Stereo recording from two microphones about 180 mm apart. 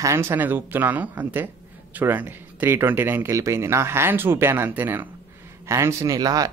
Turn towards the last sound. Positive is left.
turn(degrees=-20)  # may be behind; listen again after turning